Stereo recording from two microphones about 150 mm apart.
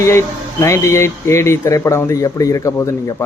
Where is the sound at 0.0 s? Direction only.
20° left (ahead or behind).